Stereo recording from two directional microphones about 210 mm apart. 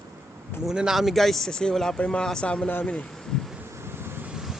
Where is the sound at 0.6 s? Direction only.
5° right (ahead or behind).